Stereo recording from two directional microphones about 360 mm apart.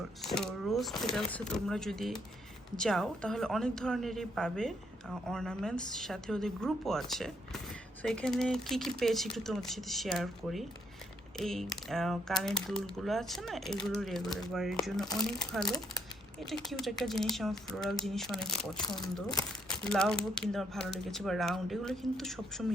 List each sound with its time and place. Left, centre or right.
0.2 s a woman's voice: centre